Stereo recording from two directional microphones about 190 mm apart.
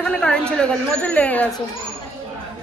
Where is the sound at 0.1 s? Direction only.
5° left (ahead or behind).